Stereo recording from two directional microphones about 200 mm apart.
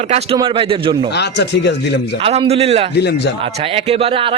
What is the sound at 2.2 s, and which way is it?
Speech, 30° right (ahead or behind).